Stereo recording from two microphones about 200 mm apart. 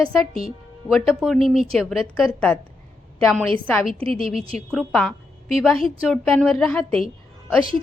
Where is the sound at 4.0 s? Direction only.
30° right (ahead or behind).